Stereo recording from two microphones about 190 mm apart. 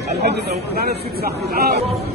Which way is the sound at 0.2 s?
55° right (ahead or behind).